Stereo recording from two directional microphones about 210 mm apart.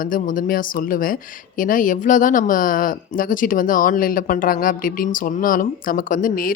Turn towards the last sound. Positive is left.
turn(degrees=40)  # may be behind; listen again after turning